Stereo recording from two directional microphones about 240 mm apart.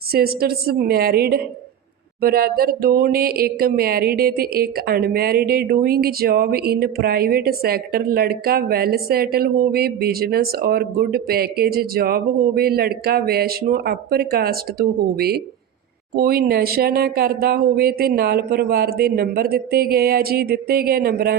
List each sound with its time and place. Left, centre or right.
0.1 s speech: right